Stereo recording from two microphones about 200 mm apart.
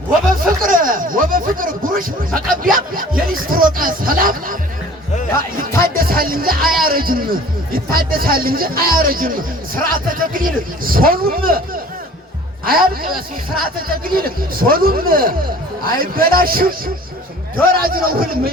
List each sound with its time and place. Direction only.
0.6 s a sound: 45° right (ahead or behind)
5.8 s music: 45° right (ahead or behind)
6.8 s a man's voice: 45° right (ahead or behind)